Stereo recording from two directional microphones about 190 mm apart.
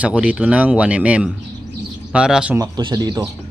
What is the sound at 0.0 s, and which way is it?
Speech, 5° right (ahead or behind).